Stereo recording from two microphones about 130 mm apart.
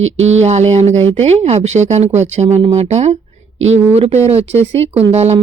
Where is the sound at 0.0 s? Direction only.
60° right (ahead or behind).